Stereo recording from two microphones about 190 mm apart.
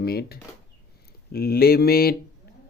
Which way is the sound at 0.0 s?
55° left (ahead or behind).